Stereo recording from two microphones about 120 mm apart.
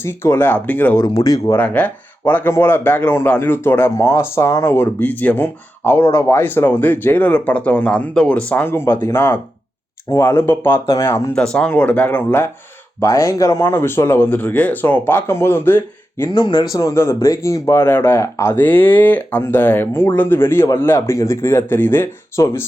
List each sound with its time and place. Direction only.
0.0 s speech: 20° left (ahead or behind)
0.9 s speech: 30° left (ahead or behind)
1.5 s speech: 15° left (ahead or behind)
11.3 s speech: 5° left (ahead or behind)
13.0 s speech: 25° left (ahead or behind)
16.3 s speech: 35° left (ahead or behind); by 22.6 s 20° left (ahead or behind)